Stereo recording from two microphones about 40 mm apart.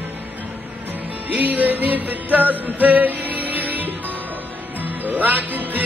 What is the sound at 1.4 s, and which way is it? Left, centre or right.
Music, right.